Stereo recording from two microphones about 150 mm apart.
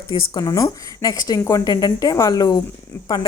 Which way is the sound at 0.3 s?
25° left (ahead or behind).